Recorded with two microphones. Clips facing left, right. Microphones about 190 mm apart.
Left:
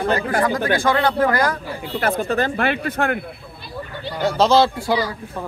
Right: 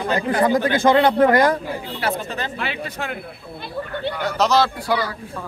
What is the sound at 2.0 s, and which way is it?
Speech, 50° left (ahead or behind).